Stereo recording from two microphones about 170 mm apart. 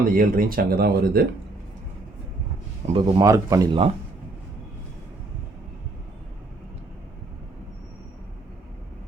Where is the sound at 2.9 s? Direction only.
25° right (ahead or behind).